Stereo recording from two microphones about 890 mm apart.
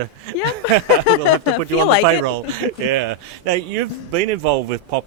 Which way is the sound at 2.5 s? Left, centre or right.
Right.